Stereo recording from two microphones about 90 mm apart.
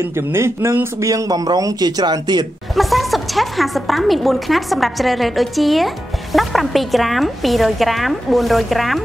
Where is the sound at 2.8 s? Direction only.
Centre (ahead or behind).